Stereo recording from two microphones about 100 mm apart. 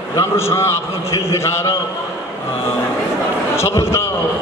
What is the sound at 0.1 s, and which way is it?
A man's voice, 30° left (ahead or behind).